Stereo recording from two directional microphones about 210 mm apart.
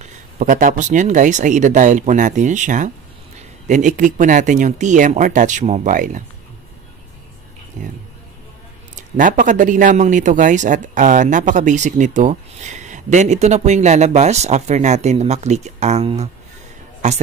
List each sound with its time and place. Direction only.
0.0 s a man's voice: 40° right (ahead or behind)
7.8 s a man's voice: 35° right (ahead or behind)
8.9 s a man's voice: 40° right (ahead or behind)